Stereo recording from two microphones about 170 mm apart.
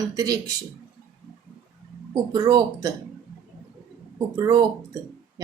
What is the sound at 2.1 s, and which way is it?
Speech, 25° right (ahead or behind).